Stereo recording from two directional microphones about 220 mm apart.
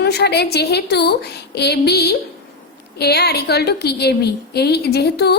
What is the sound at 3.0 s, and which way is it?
A woman's voice, 45° left (ahead or behind).